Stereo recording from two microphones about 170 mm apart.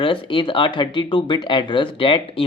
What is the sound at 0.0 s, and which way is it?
Speech, 30° left (ahead or behind).